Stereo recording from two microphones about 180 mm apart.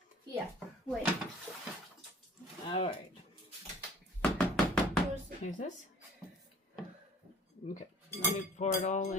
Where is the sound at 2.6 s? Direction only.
30° left (ahead or behind).